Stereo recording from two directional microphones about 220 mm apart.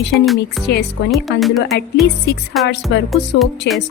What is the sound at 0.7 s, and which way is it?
Speech, 50° left (ahead or behind).